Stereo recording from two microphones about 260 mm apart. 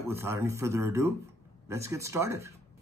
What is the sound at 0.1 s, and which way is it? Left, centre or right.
Speech, centre.